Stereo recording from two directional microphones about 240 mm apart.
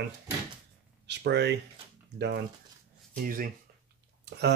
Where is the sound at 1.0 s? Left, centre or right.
Right.